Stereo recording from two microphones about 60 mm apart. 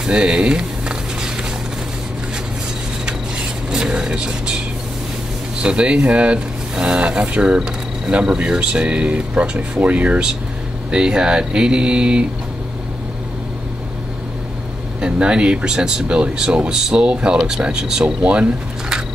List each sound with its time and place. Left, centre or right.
0.0 s a sound: centre
3.1 s vehicle: centre
5.6 s speech: centre
10.9 s speech: centre
15.0 s speech: centre